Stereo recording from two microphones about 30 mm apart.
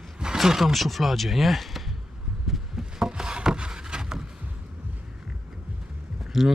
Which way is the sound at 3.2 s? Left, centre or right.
Right.